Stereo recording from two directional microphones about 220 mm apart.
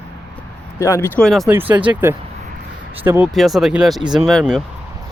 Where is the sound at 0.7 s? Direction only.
10° left (ahead or behind).